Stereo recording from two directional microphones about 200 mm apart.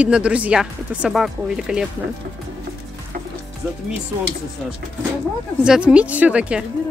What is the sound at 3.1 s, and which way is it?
Music, 40° right (ahead or behind).